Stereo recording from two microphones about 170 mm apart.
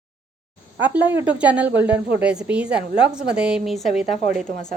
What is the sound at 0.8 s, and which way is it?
A woman's voice, 10° right (ahead or behind).